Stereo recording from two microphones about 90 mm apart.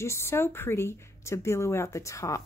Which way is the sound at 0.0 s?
30° left (ahead or behind).